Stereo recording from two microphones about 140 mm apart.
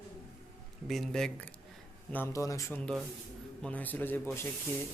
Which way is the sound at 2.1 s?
20° left (ahead or behind).